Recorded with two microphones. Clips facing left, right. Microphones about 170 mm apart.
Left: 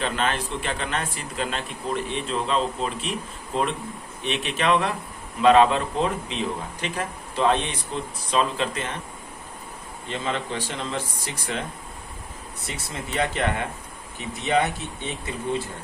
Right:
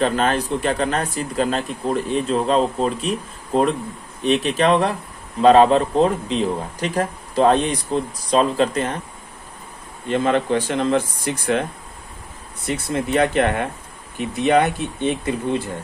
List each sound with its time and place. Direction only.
0.0 s speech: 40° right (ahead or behind)
10.1 s speech: 55° right (ahead or behind)
12.6 s speech: 55° right (ahead or behind)